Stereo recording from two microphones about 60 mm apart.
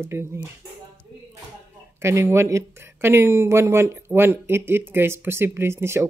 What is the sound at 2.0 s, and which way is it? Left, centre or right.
Speech, right.